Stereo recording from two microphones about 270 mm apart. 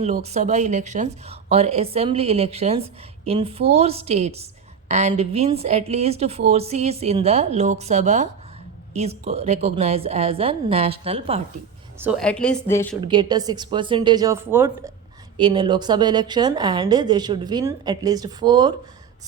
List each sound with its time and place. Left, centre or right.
0.0 s speech: right
11.9 s a woman's voice: centre
13.0 s a woman's voice: centre